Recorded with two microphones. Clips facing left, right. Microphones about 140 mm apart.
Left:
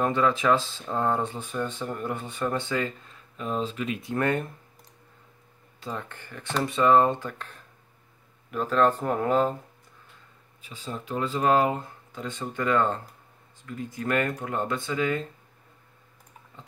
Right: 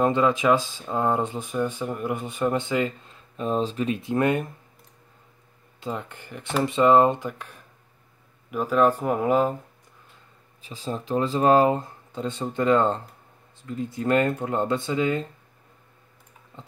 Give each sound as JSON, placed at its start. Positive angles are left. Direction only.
{"t": 0.0, "sound": "speech", "side_deg": -20}
{"t": 3.3, "sound": "speech", "side_deg": -35}
{"t": 4.1, "sound": "speech", "side_deg": -15}
{"t": 5.8, "sound": "speech", "side_deg": -15}
{"t": 10.6, "sound": "speech", "side_deg": -35}